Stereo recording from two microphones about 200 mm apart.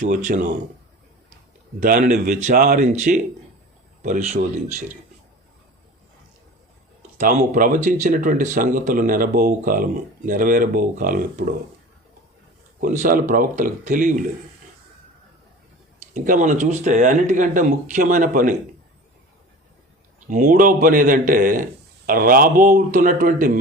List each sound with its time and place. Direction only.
0.0 s speech: 40° right (ahead or behind)
1.8 s speech: 45° right (ahead or behind)
7.2 s speech: 40° right (ahead or behind)
12.8 s speech: 40° right (ahead or behind)
16.1 s speech: 40° right (ahead or behind)
20.3 s speech: 40° right (ahead or behind)